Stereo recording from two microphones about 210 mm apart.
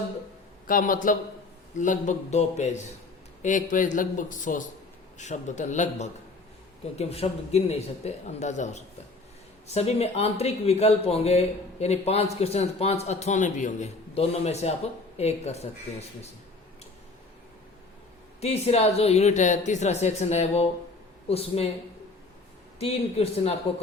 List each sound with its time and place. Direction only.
0.7 s a woman's voice: 40° left (ahead or behind)
18.3 s a woman's voice: 30° left (ahead or behind)
22.8 s speech: 30° left (ahead or behind)